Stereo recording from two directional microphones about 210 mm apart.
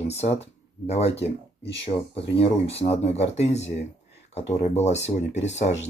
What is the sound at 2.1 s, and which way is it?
Speech, 55° left (ahead or behind).